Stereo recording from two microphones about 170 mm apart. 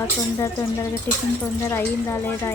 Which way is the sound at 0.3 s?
15° left (ahead or behind).